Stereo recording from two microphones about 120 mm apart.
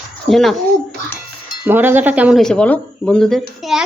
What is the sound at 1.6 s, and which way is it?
Speech, 15° right (ahead or behind).